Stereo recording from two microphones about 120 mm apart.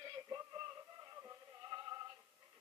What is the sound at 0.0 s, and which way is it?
Music, 40° right (ahead or behind).